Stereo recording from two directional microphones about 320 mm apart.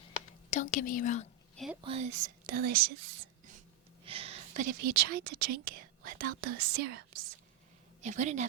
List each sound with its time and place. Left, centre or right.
0.5 s a woman's voice: left
1.5 s a woman's voice: centre
1.8 s speech: centre
4.0 s speech: centre